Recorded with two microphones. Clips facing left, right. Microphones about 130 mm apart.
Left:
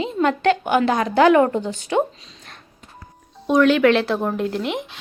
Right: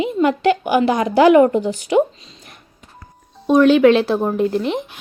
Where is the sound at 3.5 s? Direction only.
20° right (ahead or behind).